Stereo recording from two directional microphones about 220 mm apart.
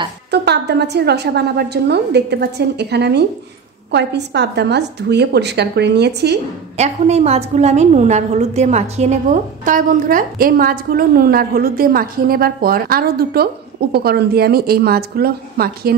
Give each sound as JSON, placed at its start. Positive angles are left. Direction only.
{"t": 0.3, "sound": "a woman's voice", "side_deg": -50}
{"t": 6.8, "sound": "a woman's voice", "side_deg": -30}